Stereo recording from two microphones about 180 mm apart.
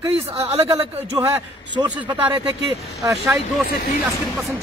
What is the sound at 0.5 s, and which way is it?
Speech, 15° right (ahead or behind).